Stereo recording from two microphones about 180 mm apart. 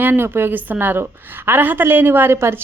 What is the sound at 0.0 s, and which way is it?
A woman's voice, 10° right (ahead or behind).